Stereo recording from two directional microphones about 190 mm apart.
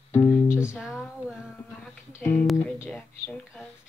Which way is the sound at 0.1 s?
10° left (ahead or behind).